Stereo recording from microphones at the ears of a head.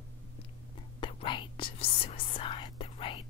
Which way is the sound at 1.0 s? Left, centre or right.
Left.